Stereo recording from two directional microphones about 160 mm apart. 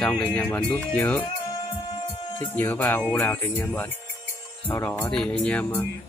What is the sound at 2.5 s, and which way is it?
Speech, 10° left (ahead or behind).